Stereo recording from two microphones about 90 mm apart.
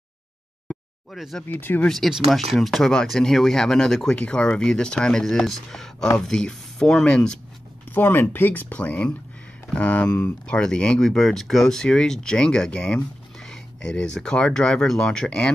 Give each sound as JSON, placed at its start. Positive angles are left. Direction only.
{"t": 1.1, "sound": "speech", "side_deg": 0}
{"t": 1.5, "sound": "speech", "side_deg": 20}
{"t": 1.9, "sound": "speech", "side_deg": 0}
{"t": 7.9, "sound": "speech", "side_deg": 25}